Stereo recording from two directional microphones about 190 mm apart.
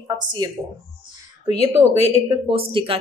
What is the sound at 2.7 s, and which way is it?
Speech, 25° right (ahead or behind).